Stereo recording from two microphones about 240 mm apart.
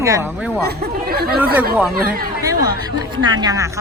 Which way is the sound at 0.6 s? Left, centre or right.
Right.